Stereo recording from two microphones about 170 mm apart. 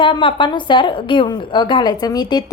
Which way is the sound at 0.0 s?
30° left (ahead or behind).